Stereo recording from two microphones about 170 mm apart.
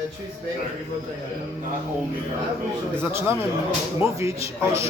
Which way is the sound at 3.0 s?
15° right (ahead or behind).